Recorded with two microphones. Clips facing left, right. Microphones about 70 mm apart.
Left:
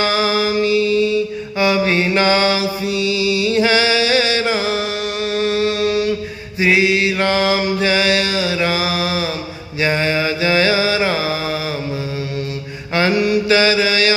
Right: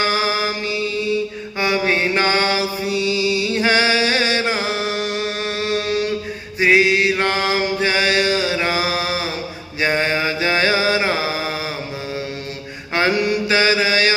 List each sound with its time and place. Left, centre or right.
0.0 s music: right
1.5 s mantra: right
12.9 s mantra: right
13.1 s mantra: right
13.5 s mantra: right